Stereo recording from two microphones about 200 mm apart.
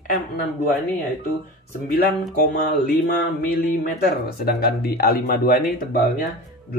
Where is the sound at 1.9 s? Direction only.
50° left (ahead or behind).